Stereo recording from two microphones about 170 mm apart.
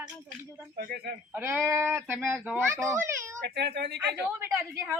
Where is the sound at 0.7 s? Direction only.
65° right (ahead or behind).